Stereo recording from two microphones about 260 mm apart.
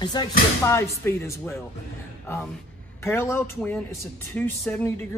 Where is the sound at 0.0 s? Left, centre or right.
Centre.